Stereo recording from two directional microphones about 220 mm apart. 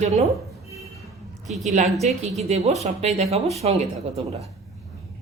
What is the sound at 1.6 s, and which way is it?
A woman's voice, 30° right (ahead or behind).